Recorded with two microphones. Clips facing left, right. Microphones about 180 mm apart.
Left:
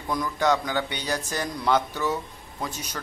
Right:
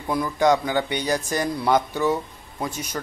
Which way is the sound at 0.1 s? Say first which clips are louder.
Right 4 dB; 10° right (ahead or behind).